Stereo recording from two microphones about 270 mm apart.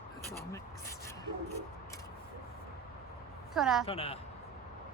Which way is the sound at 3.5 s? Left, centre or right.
Centre.